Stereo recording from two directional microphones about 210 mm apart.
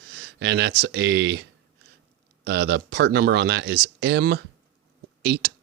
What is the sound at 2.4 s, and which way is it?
Speech, 55° right (ahead or behind).